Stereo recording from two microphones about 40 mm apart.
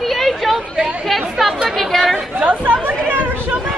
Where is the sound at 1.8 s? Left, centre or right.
Centre.